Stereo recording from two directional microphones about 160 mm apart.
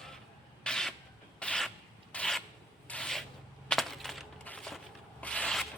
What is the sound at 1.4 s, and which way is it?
Rub, 5° left (ahead or behind).